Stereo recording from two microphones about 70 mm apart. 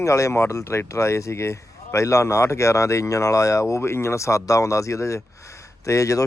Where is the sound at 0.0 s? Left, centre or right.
Left.